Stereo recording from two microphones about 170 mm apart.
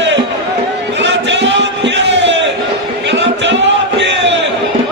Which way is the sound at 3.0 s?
90° right.